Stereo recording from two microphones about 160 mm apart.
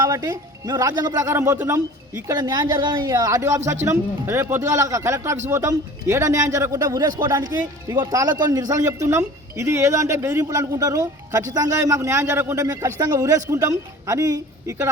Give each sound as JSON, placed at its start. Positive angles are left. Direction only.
{"t": 0.0, "sound": "speech", "side_deg": -20}